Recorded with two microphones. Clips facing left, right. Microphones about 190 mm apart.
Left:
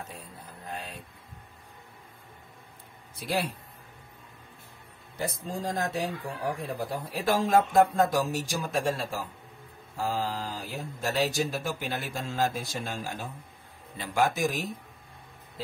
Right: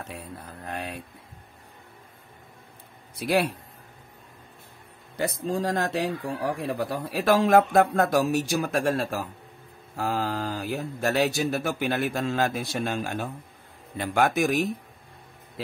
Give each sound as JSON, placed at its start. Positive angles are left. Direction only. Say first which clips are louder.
{"t": 0.1, "sound": "speech", "louder": "right 6 dB", "side_deg": -70}
{"t": 3.2, "sound": "speech", "louder": "right 6 dB", "side_deg": -70}
{"t": 5.1, "sound": "speech", "louder": "right 6 dB", "side_deg": -70}